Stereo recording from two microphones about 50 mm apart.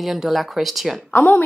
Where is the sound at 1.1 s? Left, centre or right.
Left.